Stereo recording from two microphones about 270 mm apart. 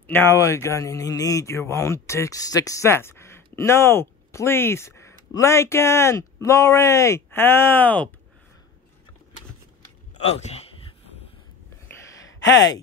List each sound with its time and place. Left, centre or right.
0.0 s speech: centre
10.2 s a sound: left
12.4 s speech: left